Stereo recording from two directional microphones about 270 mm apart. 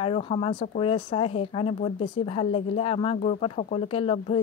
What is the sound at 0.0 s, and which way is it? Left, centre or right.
Speech, left.